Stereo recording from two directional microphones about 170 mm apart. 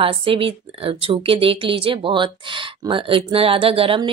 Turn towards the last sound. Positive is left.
turn(degrees=-30)  # may be behind; listen again after turning